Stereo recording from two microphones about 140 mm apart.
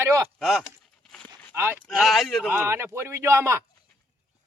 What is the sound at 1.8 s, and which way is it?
Speech, centre (ahead or behind).